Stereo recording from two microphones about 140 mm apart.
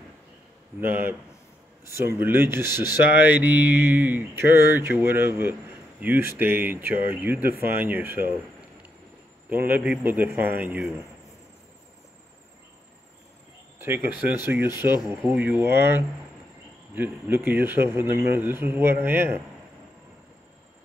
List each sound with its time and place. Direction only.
0.7 s speech: 15° right (ahead or behind)
9.5 s speech: 15° right (ahead or behind)
13.7 s speech: 15° right (ahead or behind)